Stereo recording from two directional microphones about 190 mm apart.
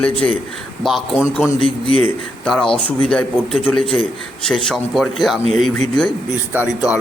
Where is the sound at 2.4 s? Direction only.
Centre (ahead or behind).